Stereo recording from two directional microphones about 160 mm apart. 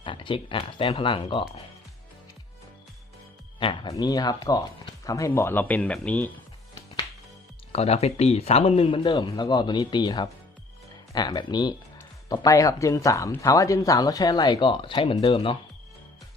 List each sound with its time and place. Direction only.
0.0 s speech: 30° left (ahead or behind)
3.6 s speech: 30° left (ahead or behind); by 6.3 s 10° left (ahead or behind)
7.7 s speech: 40° left (ahead or behind)